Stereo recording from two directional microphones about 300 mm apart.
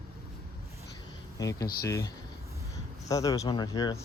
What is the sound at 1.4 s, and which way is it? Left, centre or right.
Speech, centre.